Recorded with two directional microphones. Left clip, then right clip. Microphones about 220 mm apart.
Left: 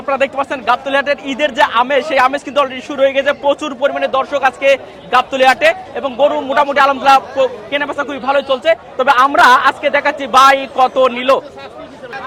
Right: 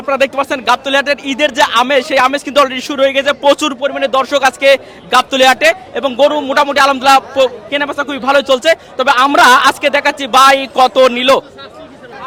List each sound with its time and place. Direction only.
0.0 s speech: 30° right (ahead or behind)
3.8 s speech: 25° right (ahead or behind); by 8.8 s 45° right (ahead or behind)
9.0 s speech: 20° right (ahead or behind)